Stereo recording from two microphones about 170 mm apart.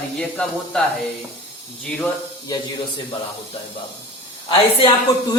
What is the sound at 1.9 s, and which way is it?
Speech, 10° left (ahead or behind).